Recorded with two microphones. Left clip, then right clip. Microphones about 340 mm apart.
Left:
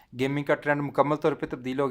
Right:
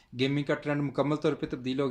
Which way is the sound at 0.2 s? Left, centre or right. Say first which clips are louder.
Left 3 dB; left.